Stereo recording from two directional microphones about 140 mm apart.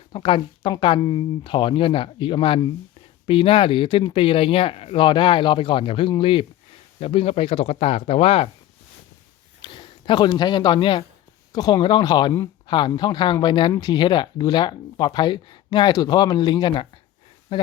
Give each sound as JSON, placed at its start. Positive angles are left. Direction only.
{"t": 0.1, "sound": "speech", "side_deg": 40}
{"t": 9.6, "sound": "speech", "side_deg": 35}